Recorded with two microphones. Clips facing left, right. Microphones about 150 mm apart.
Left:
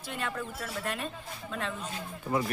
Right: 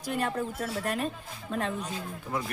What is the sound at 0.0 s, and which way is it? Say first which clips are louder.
Music: right 6 dB; 40° right (ahead or behind).